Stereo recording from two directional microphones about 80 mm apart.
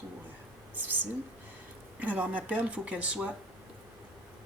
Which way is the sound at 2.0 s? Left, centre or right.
Centre.